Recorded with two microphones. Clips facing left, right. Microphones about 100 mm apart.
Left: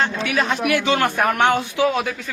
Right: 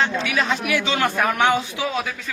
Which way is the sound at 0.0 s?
50° left (ahead or behind).